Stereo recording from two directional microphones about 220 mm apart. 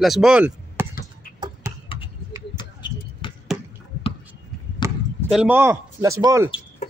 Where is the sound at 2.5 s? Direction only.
20° left (ahead or behind).